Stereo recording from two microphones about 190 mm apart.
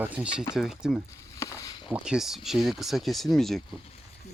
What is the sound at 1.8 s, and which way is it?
Speech, 5° right (ahead or behind).